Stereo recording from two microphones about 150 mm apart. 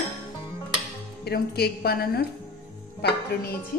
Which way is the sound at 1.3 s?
90° left.